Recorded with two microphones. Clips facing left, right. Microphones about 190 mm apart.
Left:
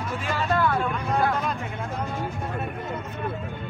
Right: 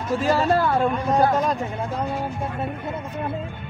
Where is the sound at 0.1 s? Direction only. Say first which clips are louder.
Right 8 dB; 40° right (ahead or behind).